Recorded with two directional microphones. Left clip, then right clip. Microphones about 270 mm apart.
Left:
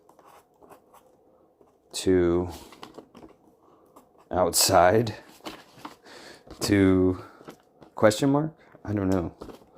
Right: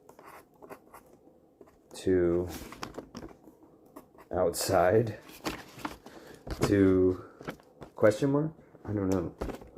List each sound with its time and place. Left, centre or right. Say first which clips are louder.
0.3 s a sound: right 4 dB; right
1.9 s speech: left 4 dB; left
2.8 s typing: right 3 dB; right
4.3 s speech: left 6 dB; left
5.4 s a sound: right 3 dB; right
6.7 s speech: left 3 dB; left